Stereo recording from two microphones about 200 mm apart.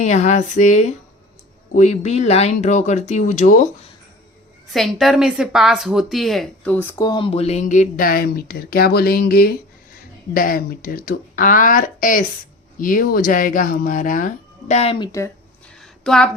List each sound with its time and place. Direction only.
0.0 s speech: 35° left (ahead or behind)
4.7 s a woman's voice: centre (ahead or behind); by 15.3 s 20° left (ahead or behind)
15.8 s a sound: 5° left (ahead or behind)